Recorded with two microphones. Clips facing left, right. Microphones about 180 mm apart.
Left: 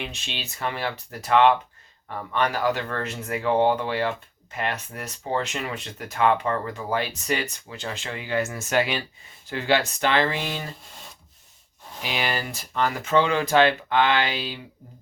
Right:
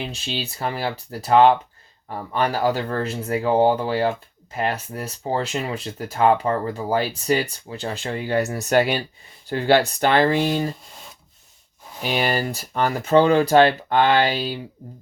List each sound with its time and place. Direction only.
0.3 s speech: 35° right (ahead or behind)
12.0 s speech: 45° right (ahead or behind)